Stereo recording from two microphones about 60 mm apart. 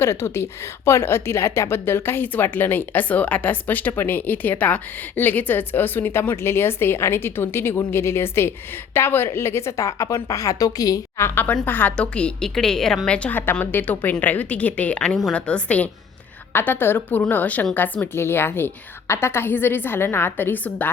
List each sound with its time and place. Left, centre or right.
0.0 s a woman's voice: left
11.2 s a woman's voice: left
11.6 s a woman's voice: left
11.9 s a woman's voice: centre
13.1 s a woman's voice: left
13.3 s a woman's voice: left
16.5 s a woman's voice: left